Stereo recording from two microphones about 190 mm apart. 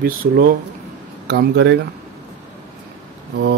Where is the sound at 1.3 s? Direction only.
60° right (ahead or behind).